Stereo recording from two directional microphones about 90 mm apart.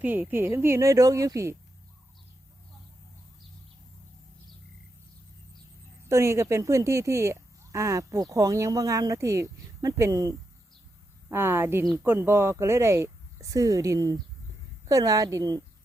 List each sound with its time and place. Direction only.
0.0 s a woman's voice: 20° right (ahead or behind); by 1.5 s 40° right (ahead or behind)
6.1 s speech: 35° right (ahead or behind)
11.3 s a woman's voice: 25° right (ahead or behind)